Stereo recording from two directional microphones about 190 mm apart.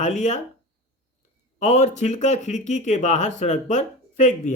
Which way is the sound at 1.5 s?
35° left (ahead or behind).